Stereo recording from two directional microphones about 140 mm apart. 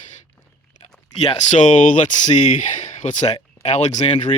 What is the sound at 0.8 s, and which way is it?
Speech, 45° left (ahead or behind).